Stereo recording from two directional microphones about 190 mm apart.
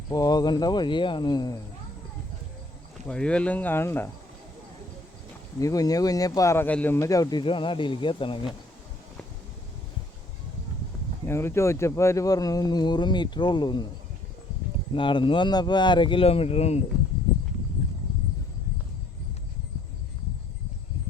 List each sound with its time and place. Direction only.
0.1 s speech: 20° left (ahead or behind)
3.1 s speech: 5° left (ahead or behind)
5.5 s speech: 20° left (ahead or behind)
11.3 s speech: 15° left (ahead or behind)
14.9 s speech: 25° left (ahead or behind)